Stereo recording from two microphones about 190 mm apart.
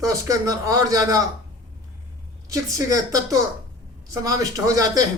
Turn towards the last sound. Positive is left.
turn(degrees=-20)  # may be behind; listen again after turning